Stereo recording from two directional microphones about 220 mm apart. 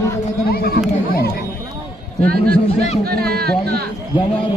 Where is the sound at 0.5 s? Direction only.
45° left (ahead or behind).